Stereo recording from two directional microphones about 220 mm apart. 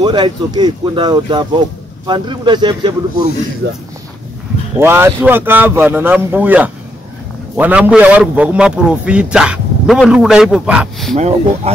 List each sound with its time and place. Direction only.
0.0 s speech: 20° right (ahead or behind)
3.6 s speech: 55° right (ahead or behind)
4.7 s a man's voice: 10° right (ahead or behind)
11.1 s speech: 30° right (ahead or behind)